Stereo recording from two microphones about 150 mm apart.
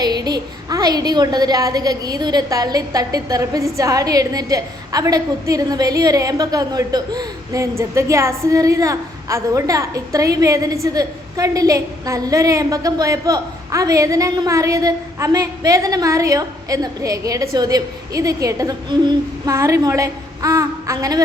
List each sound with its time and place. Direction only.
0.0 s a woman's voice: 25° right (ahead or behind)